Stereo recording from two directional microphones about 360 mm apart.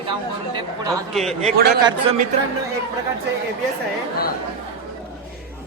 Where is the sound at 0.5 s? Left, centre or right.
Centre.